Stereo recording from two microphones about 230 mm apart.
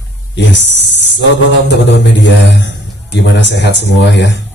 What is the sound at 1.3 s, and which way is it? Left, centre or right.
A man's voice, left.